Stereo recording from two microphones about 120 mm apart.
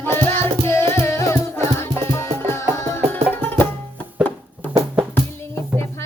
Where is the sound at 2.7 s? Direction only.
25° left (ahead or behind).